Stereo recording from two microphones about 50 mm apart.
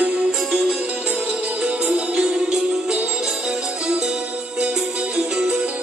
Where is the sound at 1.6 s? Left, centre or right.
Centre.